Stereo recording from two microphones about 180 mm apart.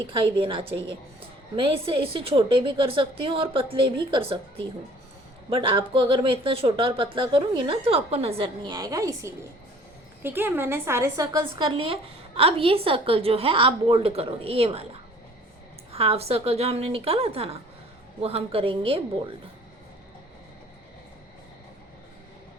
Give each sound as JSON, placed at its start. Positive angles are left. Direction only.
{"t": 0.1, "sound": "speech", "side_deg": -30}
{"t": 5.5, "sound": "speech", "side_deg": -30}
{"t": 8.7, "sound": "a woman's voice", "side_deg": -20}
{"t": 11.4, "sound": "a woman's voice", "side_deg": -30}
{"t": 15.9, "sound": "a woman's voice", "side_deg": -35}